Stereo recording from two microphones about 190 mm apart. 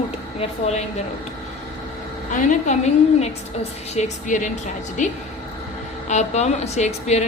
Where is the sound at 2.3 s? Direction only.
40° left (ahead or behind).